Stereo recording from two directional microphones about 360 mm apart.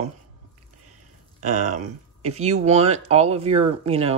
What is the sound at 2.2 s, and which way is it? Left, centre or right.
Speech, centre.